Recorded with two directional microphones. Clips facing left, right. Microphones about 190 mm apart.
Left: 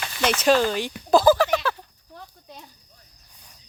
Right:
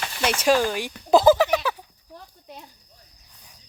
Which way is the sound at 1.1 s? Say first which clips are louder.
Right 1 dB; 20° right (ahead or behind).